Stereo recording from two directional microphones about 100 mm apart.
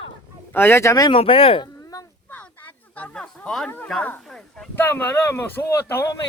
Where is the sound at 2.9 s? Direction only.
10° left (ahead or behind).